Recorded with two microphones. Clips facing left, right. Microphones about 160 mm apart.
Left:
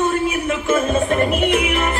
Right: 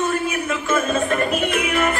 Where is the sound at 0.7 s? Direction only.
20° left (ahead or behind).